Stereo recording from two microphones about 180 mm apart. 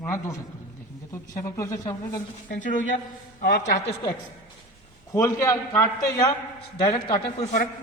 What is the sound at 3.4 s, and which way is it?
Speech, 65° left (ahead or behind).